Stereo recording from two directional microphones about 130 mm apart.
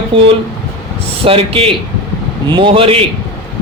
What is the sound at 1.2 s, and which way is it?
A man's voice, 45° right (ahead or behind).